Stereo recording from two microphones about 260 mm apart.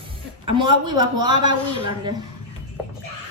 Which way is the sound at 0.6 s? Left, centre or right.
Centre.